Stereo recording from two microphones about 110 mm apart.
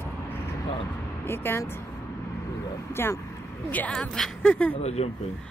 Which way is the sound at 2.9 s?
20° left (ahead or behind).